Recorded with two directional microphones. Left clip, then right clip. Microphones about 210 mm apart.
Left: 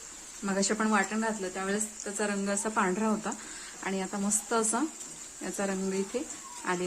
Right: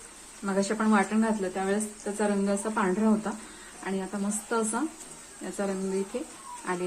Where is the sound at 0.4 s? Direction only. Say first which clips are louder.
Right 2 dB; 10° left (ahead or behind).